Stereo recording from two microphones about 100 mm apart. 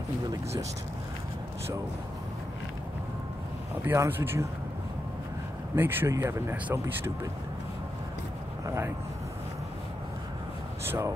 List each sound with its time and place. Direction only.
0.3 s a sound: 35° right (ahead or behind)
3.8 s speech: 25° right (ahead or behind)
5.8 s speech: 20° right (ahead or behind)
8.6 s speech: 30° right (ahead or behind)
10.9 s speech: 25° right (ahead or behind)